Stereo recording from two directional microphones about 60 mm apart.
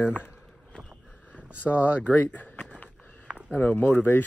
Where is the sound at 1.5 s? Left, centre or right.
Left.